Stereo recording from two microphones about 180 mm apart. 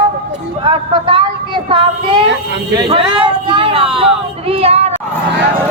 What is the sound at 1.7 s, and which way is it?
Speech, 25° right (ahead or behind).